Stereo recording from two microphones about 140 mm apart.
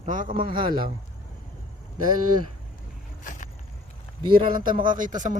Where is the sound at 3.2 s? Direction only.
65° left (ahead or behind).